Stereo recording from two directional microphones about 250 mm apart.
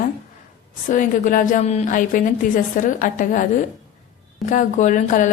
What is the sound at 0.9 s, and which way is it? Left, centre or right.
A woman's voice, left.